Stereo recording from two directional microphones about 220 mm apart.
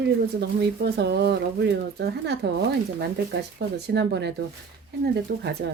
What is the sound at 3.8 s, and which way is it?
Speech, 50° right (ahead or behind).